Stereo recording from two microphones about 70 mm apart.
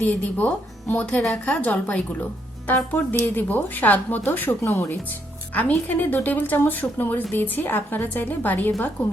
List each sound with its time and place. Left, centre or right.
0.0 s speech: left
1.2 s a woman's voice: centre
1.6 s speech: centre
5.5 s speech: left